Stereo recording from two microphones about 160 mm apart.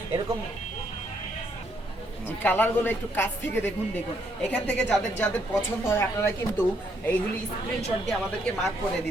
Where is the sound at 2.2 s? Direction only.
10° left (ahead or behind).